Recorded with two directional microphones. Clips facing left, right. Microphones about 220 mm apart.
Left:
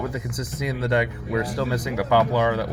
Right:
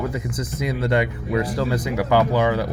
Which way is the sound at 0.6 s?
5° right (ahead or behind).